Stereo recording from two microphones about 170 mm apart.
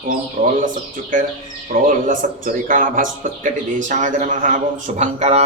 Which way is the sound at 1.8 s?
50° right (ahead or behind).